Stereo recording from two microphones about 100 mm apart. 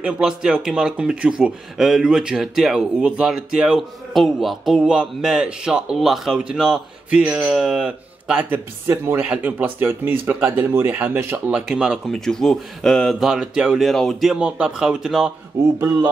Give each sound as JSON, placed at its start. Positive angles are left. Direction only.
{"t": 0.0, "sound": "speech", "side_deg": -5}
{"t": 8.8, "sound": "speech", "side_deg": -25}
{"t": 9.2, "sound": "speech", "side_deg": -15}
{"t": 12.1, "sound": "speech", "side_deg": 5}